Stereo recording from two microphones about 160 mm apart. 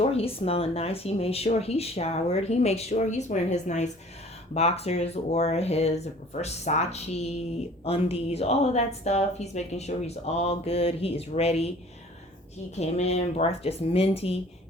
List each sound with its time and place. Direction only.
0.0 s speech: 40° left (ahead or behind)
12.7 s speech: 40° left (ahead or behind)